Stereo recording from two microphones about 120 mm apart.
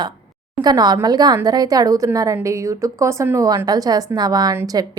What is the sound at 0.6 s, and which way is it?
A woman's voice, 35° right (ahead or behind).